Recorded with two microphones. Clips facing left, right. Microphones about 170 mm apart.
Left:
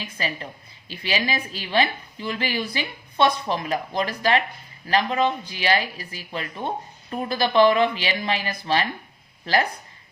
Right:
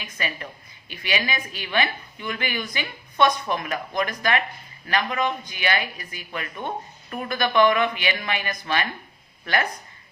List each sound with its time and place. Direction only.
0.0 s speech: 30° left (ahead or behind)